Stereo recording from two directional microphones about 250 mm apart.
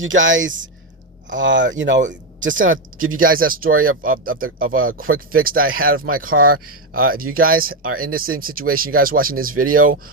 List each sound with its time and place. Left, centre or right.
0.0 s speech: right
3.3 s speech: right
7.9 s speech: right
8.1 s speech: right